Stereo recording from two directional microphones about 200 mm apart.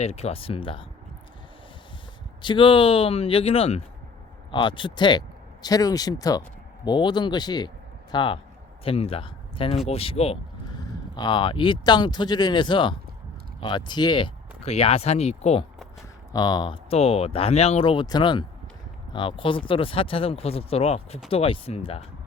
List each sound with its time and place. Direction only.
0.0 s speech: 30° left (ahead or behind)
2.4 s speech: 25° left (ahead or behind)
16.3 s speech: 20° left (ahead or behind)